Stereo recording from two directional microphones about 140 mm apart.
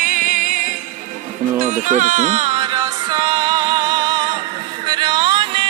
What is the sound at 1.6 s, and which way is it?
Speech, 60° right (ahead or behind).